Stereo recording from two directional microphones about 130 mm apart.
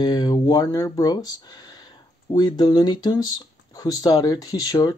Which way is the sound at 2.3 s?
30° left (ahead or behind).